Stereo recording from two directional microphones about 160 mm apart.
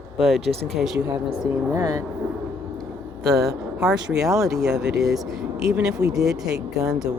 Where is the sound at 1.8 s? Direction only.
20° right (ahead or behind).